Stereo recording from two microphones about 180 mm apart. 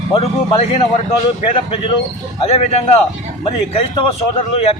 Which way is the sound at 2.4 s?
35° left (ahead or behind).